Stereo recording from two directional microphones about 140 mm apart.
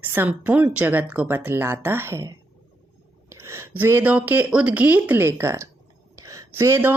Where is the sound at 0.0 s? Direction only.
15° right (ahead or behind).